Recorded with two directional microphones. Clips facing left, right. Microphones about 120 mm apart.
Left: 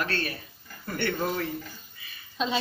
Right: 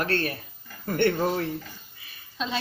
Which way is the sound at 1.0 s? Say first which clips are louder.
Right 5 dB; 30° right (ahead or behind).